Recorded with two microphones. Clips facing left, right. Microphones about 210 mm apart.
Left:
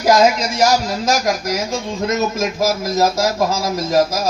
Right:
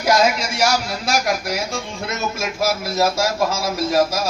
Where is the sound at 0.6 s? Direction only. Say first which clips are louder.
Left 5 dB; 40° left (ahead or behind).